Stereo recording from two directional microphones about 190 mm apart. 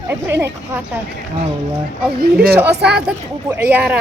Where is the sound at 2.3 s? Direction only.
5° right (ahead or behind).